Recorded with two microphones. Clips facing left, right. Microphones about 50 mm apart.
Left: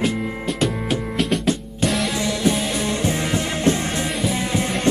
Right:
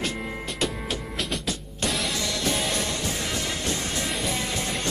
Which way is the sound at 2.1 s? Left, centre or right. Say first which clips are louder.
Left 7 dB; centre.